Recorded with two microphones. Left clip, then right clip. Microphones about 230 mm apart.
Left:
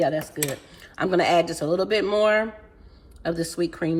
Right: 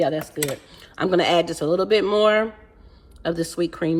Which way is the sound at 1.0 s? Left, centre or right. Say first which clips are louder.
Right 1 dB; right.